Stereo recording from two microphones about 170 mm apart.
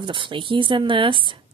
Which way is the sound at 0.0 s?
30° right (ahead or behind).